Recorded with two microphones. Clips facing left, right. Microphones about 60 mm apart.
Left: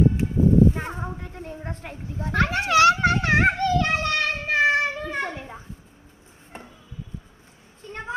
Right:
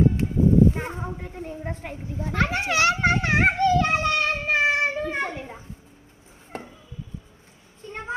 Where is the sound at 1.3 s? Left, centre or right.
Centre.